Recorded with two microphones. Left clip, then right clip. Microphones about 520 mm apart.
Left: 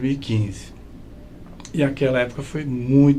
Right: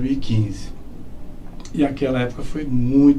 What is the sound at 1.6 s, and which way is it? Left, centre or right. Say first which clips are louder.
Speech: even; left.